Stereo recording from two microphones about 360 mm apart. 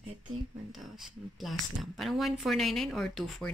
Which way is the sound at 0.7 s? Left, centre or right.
Centre.